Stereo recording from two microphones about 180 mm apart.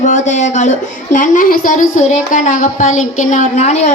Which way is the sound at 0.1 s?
40° left (ahead or behind).